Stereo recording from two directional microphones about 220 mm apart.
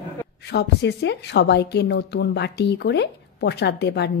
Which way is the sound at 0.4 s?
50° left (ahead or behind).